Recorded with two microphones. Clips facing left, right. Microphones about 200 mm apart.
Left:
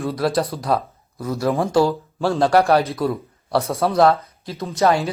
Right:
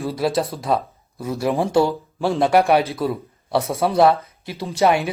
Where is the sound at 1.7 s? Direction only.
25° right (ahead or behind).